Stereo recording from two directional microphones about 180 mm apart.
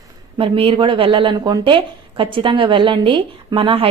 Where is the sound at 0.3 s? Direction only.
30° right (ahead or behind).